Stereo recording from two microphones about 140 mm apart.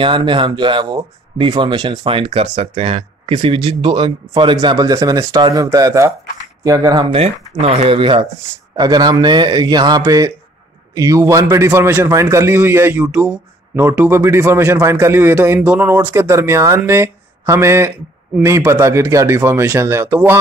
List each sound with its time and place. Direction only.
0.0 s speech: 35° right (ahead or behind)
7.2 s a man's voice: 50° right (ahead or behind); by 20.3 s 15° right (ahead or behind)